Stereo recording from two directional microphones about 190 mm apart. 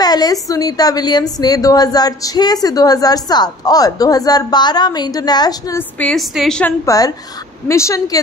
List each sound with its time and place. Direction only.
0.0 s a woman's voice: 20° left (ahead or behind); by 6.7 s centre (ahead or behind)
6.9 s a woman's voice: 20° left (ahead or behind)